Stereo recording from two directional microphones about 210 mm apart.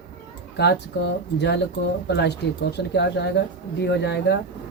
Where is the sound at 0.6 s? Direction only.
50° left (ahead or behind).